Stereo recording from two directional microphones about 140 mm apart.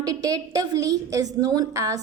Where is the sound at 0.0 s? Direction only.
25° right (ahead or behind).